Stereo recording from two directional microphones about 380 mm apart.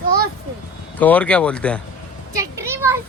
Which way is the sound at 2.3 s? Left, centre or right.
Centre.